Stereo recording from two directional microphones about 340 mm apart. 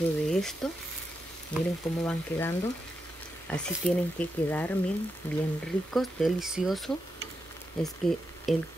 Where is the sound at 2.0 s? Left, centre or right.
Centre.